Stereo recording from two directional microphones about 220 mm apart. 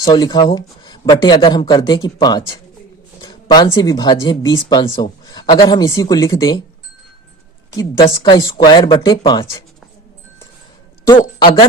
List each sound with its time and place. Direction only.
0.0 s speech: 20° left (ahead or behind)
7.7 s speech: 20° left (ahead or behind)
11.0 s speech: 20° left (ahead or behind)